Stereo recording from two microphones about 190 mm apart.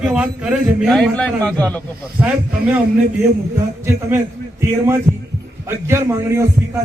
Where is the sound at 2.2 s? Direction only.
10° right (ahead or behind).